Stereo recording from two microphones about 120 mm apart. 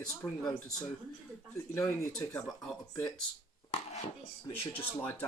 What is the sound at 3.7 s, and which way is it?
Dishes, 60° left (ahead or behind).